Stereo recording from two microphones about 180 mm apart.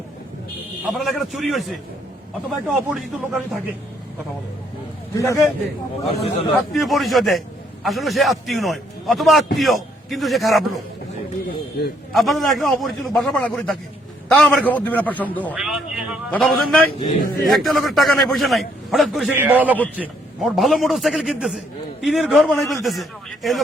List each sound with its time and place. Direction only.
0.9 s a man's voice: centre (ahead or behind)
5.1 s a man's voice: 15° left (ahead or behind)
6.1 s a man's voice: 30° left (ahead or behind)
6.7 s a man's voice: centre (ahead or behind)
12.1 s a man's voice: centre (ahead or behind)
15.5 s a man's voice: 5° right (ahead or behind)
17.0 s speech: 45° left (ahead or behind)
17.5 s a man's voice: centre (ahead or behind)